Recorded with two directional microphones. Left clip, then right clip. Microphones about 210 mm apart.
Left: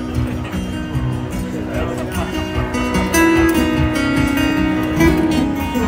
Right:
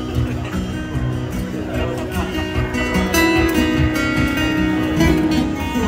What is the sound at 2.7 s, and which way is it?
Music, 20° left (ahead or behind).